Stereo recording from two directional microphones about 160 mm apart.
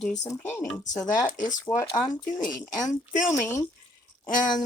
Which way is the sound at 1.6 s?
20° left (ahead or behind).